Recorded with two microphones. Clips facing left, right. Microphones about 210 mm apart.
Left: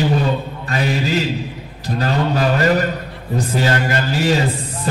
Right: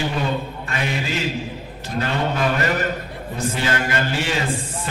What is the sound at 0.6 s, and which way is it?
Mantra, 35° left (ahead or behind).